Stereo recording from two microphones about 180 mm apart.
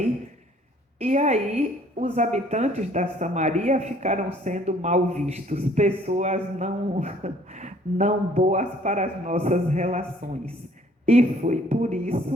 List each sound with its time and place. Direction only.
0.9 s a woman's voice: 40° right (ahead or behind)
11.0 s a woman's voice: 40° right (ahead or behind)